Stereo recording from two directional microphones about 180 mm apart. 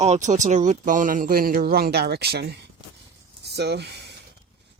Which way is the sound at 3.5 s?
70° right (ahead or behind).